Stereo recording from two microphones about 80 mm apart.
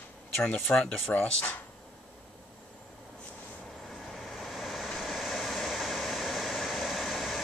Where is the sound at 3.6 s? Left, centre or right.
Centre.